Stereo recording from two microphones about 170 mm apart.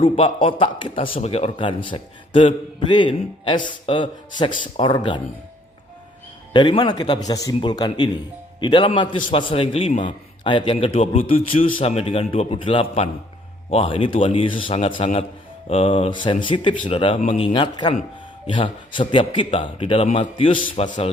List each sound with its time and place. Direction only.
0.0 s a man's voice: 30° left (ahead or behind)
6.5 s a man's voice: 25° left (ahead or behind)
17.2 s speech: 45° left (ahead or behind)
17.4 s a man's voice: 30° left (ahead or behind)